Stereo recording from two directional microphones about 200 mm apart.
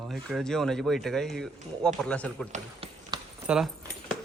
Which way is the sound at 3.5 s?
Centre (ahead or behind).